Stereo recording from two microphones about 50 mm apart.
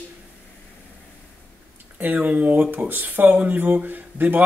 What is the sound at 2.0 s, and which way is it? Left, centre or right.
Speech, right.